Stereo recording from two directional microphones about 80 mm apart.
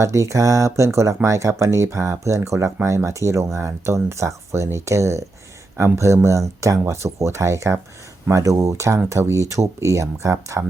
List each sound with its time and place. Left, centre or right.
0.0 s speech: right